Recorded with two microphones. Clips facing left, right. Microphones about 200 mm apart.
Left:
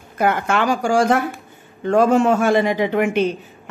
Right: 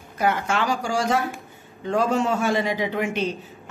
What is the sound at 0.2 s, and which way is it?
Speech, 55° left (ahead or behind).